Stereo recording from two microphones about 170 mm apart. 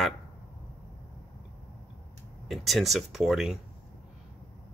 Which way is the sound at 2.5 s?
Centre (ahead or behind).